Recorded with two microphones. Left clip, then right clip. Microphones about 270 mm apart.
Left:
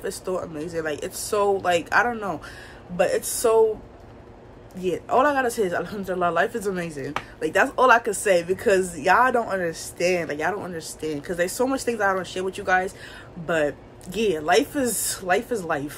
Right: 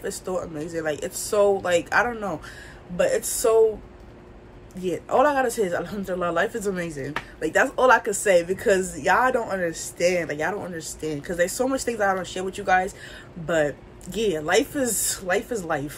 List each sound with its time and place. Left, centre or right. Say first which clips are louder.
0.0 s speech: left 1 dB; centre
4.8 s speech: even; centre